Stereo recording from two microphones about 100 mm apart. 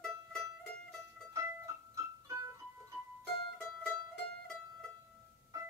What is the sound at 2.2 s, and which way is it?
Music, 30° right (ahead or behind).